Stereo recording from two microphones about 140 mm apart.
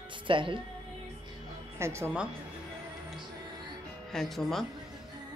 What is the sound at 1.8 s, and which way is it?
Speech, 20° right (ahead or behind).